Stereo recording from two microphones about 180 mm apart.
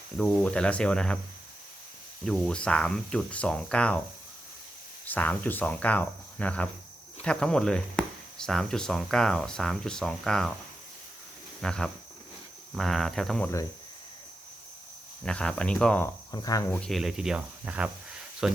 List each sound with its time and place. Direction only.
0.2 s speech: 5° left (ahead or behind)
2.2 s speech: 5° left (ahead or behind)
5.0 s speech: 10° left (ahead or behind)
11.6 s speech: 5° left (ahead or behind)
15.2 s speech: 5° left (ahead or behind)
16.3 s cricket: 20° left (ahead or behind)
16.8 s speech: centre (ahead or behind)